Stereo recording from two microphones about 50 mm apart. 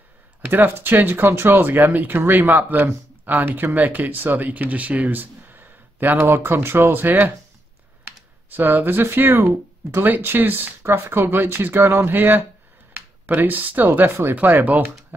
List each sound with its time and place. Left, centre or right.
0.5 s speech: right
8.5 s speech: right
10.0 s speech: right
10.8 s speech: right